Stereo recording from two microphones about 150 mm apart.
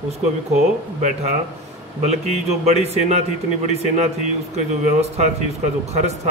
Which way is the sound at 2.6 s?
45° right (ahead or behind).